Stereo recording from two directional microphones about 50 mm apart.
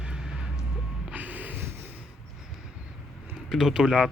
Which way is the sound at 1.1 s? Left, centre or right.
Right.